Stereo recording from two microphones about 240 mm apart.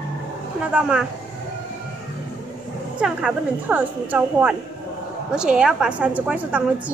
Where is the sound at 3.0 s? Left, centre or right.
Centre.